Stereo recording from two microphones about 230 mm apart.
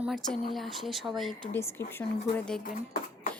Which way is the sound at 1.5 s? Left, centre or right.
Centre.